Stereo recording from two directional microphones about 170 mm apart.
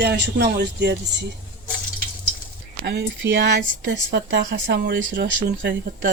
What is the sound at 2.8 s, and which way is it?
Speech, 85° right.